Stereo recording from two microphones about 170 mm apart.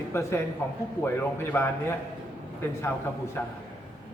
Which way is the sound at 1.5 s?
15° left (ahead or behind).